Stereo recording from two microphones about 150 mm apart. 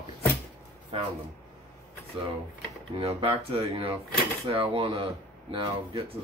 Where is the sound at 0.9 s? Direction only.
40° right (ahead or behind).